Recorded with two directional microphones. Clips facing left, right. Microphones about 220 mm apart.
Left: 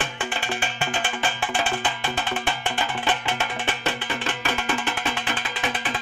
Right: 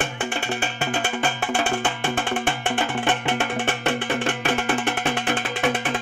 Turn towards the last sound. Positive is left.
turn(degrees=-50)  # may be behind; listen again after turning